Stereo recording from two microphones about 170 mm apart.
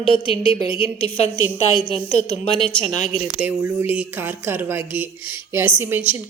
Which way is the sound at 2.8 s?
45° left (ahead or behind).